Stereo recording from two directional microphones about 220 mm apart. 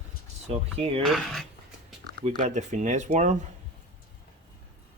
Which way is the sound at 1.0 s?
Centre (ahead or behind).